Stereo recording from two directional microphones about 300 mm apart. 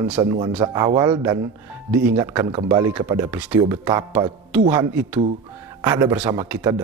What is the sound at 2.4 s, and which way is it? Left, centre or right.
Speech, centre.